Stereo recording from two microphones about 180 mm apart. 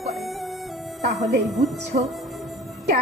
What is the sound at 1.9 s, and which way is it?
Speech, 50° right (ahead or behind).